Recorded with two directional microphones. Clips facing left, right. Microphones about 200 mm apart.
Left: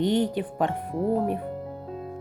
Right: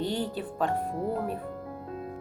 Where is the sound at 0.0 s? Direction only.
20° left (ahead or behind).